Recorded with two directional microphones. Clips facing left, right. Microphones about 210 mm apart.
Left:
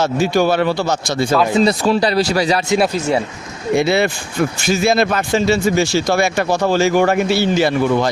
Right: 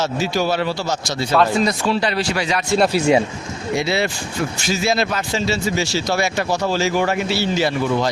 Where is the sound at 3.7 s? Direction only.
55° left (ahead or behind).